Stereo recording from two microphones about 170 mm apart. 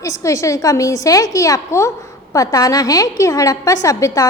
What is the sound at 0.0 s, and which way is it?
A woman's voice, 20° left (ahead or behind).